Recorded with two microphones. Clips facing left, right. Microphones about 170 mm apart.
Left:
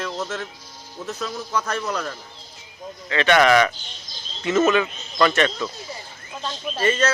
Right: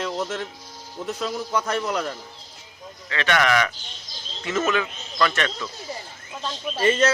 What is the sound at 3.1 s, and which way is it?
A man's voice, 20° left (ahead or behind).